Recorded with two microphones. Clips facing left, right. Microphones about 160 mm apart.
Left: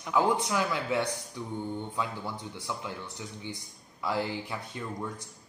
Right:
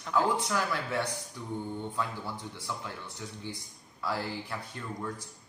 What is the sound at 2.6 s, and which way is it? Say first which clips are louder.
Speech: left 4 dB; 15° left (ahead or behind).